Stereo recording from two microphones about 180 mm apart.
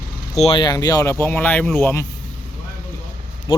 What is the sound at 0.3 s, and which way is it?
Speech, 30° left (ahead or behind).